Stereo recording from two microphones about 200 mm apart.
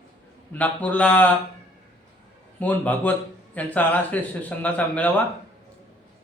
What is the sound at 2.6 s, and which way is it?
A man's voice, 5° left (ahead or behind).